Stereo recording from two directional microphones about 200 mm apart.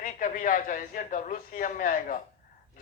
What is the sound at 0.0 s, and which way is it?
A man's voice, 40° left (ahead or behind).